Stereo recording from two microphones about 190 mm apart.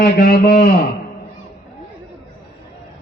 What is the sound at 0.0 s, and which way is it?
Mantra, 50° left (ahead or behind).